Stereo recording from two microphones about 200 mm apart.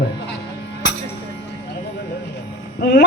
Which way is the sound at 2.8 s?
55° left (ahead or behind).